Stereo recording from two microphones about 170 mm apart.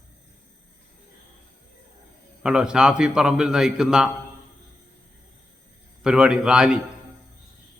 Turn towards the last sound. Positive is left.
turn(degrees=-5)  # may be behind; listen again after turning